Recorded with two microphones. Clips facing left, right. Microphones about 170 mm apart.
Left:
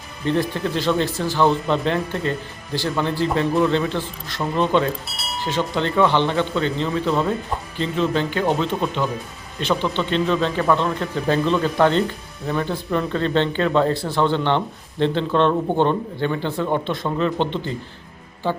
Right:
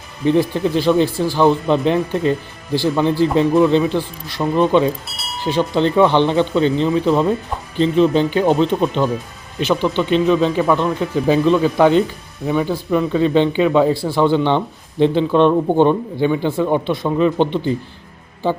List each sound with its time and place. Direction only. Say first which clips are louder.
0.3 s speech: right 6 dB; 15° right (ahead or behind)
5.0 s a sound: even; centre (ahead or behind)
5.5 s speech: right 6 dB; 15° right (ahead or behind)